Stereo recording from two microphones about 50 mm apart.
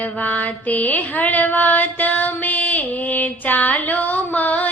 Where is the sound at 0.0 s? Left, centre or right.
Left.